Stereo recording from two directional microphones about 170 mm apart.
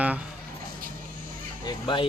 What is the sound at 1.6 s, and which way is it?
Speech, 30° left (ahead or behind).